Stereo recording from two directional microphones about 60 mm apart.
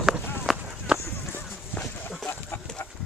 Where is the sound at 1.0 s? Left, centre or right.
Left.